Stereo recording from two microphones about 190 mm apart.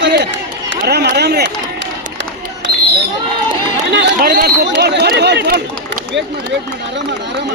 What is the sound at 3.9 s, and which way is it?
Speech, 65° right (ahead or behind).